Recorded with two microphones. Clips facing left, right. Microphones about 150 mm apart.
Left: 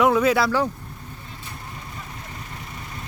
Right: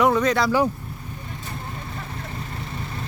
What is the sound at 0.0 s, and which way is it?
Speech, 5° left (ahead or behind).